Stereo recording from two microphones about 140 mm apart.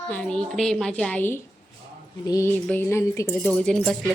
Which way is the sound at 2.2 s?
25° left (ahead or behind).